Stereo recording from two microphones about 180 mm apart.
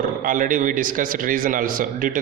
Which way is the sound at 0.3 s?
50° right (ahead or behind).